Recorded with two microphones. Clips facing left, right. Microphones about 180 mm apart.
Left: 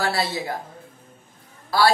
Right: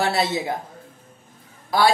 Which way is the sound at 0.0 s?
20° right (ahead or behind).